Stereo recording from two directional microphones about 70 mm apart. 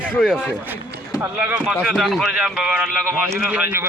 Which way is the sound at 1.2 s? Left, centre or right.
Right.